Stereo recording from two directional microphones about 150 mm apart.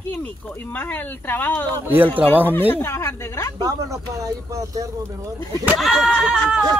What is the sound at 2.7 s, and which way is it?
Speech, 15° left (ahead or behind).